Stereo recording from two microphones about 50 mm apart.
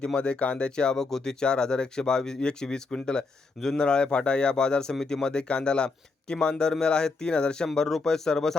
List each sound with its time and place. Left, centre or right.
0.0 s speech: left